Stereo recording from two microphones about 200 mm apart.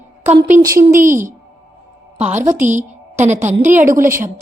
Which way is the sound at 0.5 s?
10° right (ahead or behind).